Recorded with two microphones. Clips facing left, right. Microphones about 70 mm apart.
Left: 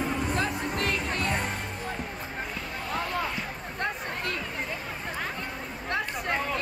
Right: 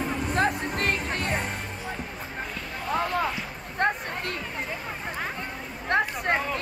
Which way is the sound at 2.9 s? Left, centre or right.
Right.